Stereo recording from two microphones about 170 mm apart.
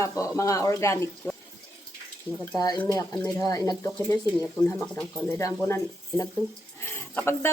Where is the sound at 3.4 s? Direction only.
20° left (ahead or behind).